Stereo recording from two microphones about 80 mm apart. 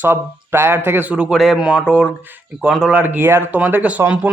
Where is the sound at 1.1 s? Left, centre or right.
Centre.